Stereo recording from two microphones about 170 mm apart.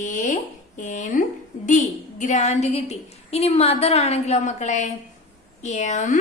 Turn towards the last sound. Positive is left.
turn(degrees=45)  # may be behind; listen again after turning